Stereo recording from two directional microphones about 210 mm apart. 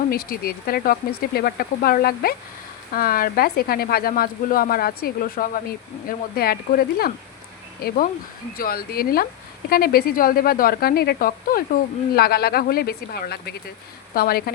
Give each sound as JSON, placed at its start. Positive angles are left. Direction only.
{"t": 0.1, "sound": "speech", "side_deg": 45}